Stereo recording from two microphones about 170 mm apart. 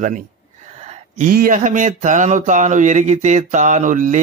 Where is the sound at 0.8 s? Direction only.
45° right (ahead or behind).